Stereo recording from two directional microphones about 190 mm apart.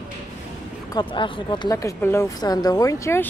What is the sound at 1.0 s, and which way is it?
A woman's voice, 25° left (ahead or behind).